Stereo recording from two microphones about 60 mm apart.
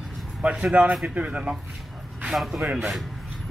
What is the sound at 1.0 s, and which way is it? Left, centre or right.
Speech, right.